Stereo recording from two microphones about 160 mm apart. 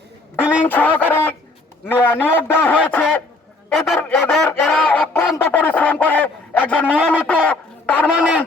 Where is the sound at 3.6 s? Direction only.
5° left (ahead or behind).